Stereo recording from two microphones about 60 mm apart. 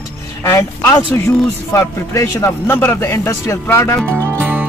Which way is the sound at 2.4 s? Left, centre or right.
Left.